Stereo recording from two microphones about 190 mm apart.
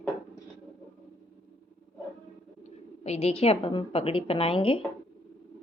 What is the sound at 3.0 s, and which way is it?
A woman's voice, 35° left (ahead or behind).